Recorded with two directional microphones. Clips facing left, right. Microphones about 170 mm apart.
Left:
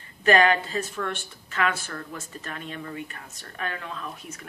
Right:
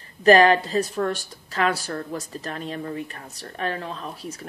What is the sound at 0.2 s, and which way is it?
Speech, 35° right (ahead or behind).